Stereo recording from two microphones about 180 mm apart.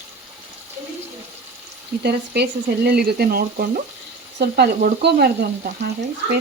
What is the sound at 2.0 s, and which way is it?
Frying, 65° right (ahead or behind).